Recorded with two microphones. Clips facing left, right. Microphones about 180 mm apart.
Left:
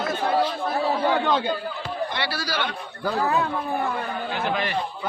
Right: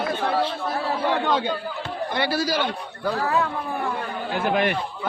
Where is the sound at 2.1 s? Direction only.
45° right (ahead or behind).